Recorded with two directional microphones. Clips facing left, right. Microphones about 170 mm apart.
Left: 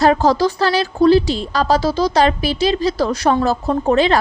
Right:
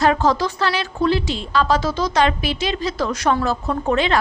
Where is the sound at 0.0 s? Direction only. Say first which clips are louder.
Left 4 dB; 35° left (ahead or behind).